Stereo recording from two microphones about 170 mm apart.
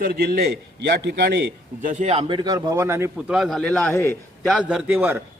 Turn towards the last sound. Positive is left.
turn(degrees=-10)  # may be behind; listen again after turning